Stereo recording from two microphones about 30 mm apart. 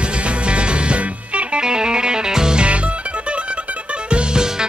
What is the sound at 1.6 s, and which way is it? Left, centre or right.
Music, right.